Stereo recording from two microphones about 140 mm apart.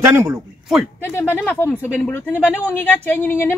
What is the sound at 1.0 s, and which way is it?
A woman's voice, 15° left (ahead or behind).